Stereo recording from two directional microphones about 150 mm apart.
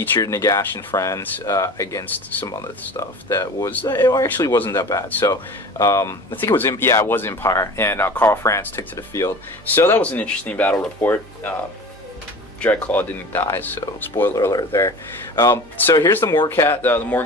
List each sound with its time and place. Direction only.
0.0 s speech: 15° left (ahead or behind)
12.6 s speech: 10° left (ahead or behind)